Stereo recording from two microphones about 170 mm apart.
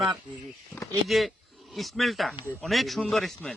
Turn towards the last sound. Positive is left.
turn(degrees=0)  # may be behind; listen again after turning